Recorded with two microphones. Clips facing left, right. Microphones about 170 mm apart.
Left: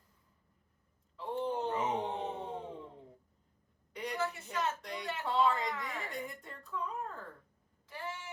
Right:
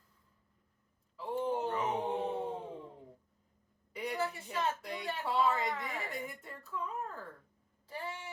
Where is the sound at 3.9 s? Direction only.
5° right (ahead or behind).